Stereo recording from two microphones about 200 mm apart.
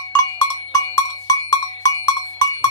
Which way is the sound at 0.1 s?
20° left (ahead or behind).